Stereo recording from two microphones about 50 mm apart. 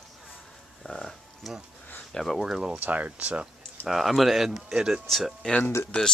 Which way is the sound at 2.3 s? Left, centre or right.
Centre.